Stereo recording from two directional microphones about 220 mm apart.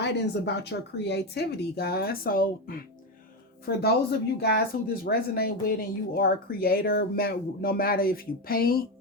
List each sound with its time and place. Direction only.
0.0 s speech: 50° left (ahead or behind)